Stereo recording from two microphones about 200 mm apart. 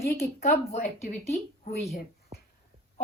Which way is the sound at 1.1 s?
35° left (ahead or behind).